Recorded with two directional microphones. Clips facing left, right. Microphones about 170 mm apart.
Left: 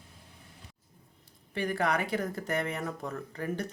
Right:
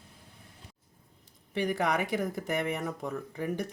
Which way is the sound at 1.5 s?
20° right (ahead or behind).